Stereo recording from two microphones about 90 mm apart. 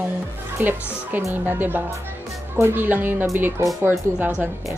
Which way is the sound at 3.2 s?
35° right (ahead or behind).